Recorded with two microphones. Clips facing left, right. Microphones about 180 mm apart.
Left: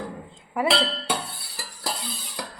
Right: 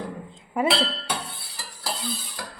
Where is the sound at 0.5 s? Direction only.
25° right (ahead or behind).